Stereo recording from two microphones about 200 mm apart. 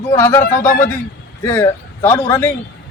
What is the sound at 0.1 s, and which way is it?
Speech, 15° left (ahead or behind).